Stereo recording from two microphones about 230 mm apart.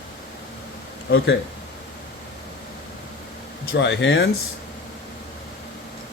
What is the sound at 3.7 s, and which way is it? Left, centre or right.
Speech, left.